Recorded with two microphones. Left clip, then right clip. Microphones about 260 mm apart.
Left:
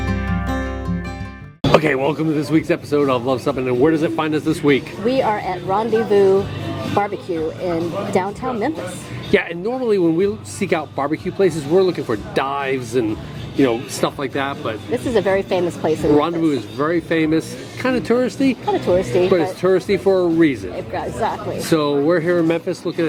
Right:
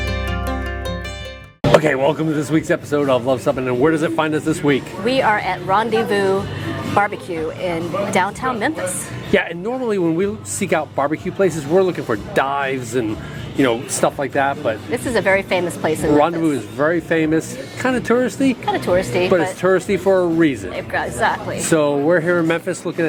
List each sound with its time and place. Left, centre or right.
1.7 s speech: centre
5.0 s speech: right
9.3 s speech: centre
14.2 s speech: centre
15.0 s a woman's voice: right
16.1 s speech: centre
18.6 s a woman's voice: right
19.6 s speech: centre
20.9 s speech: right
21.7 s speech: centre